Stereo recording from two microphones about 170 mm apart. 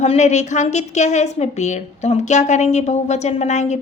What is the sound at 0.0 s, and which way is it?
A woman's voice, 40° left (ahead or behind).